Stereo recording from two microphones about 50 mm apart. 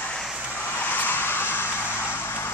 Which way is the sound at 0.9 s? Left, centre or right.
Left.